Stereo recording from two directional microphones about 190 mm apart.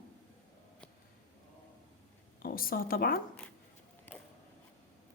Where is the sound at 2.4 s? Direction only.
50° left (ahead or behind).